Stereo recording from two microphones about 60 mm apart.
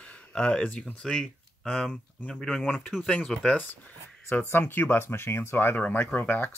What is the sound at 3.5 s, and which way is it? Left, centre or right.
Speech, left.